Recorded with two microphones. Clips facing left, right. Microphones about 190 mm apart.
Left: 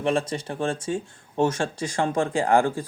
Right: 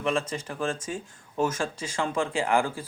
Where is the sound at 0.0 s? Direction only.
35° left (ahead or behind).